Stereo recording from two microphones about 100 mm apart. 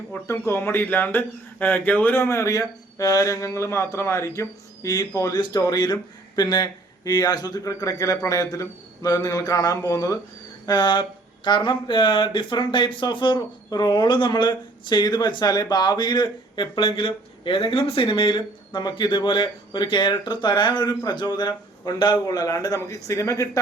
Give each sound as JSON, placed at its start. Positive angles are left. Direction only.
{"t": 0.3, "sound": "speech", "side_deg": 30}
{"t": 10.7, "sound": "speech", "side_deg": 45}
{"t": 13.7, "sound": "speech", "side_deg": 40}